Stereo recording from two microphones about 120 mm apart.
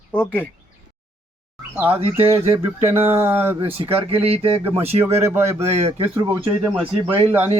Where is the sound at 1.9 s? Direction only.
55° right (ahead or behind).